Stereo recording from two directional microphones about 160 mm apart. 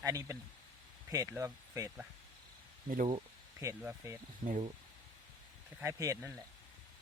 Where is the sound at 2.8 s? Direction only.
55° right (ahead or behind).